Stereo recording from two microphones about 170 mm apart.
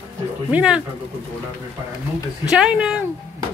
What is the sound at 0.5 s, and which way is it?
Speech, 5° right (ahead or behind).